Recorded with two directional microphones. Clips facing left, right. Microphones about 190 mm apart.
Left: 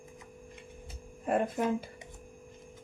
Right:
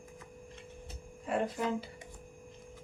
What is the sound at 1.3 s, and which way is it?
Speech, 50° left (ahead or behind).